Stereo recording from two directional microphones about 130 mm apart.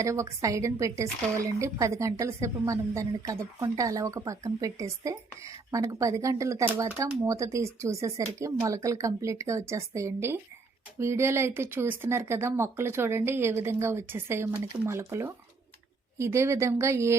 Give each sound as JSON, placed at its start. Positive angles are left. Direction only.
{"t": 0.0, "sound": "speech", "side_deg": -25}